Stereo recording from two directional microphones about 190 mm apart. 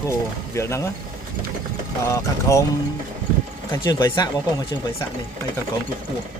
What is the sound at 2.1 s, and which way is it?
Speech, 15° left (ahead or behind).